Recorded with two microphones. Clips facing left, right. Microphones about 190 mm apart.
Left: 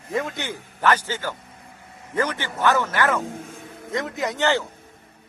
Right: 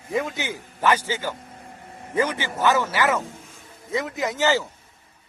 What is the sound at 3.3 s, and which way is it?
Music, 60° left (ahead or behind).